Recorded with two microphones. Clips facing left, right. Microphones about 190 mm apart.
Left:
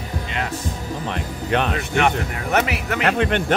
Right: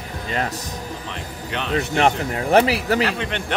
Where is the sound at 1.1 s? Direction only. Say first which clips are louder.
Left 10 dB; 55° left (ahead or behind).